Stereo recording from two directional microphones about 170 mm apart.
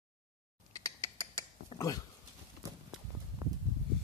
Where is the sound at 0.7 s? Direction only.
20° left (ahead or behind).